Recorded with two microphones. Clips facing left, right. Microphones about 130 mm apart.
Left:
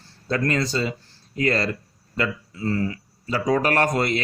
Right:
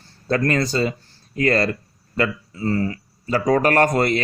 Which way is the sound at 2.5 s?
40° right (ahead or behind).